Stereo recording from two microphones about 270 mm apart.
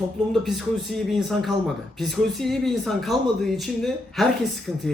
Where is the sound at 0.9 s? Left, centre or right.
Centre.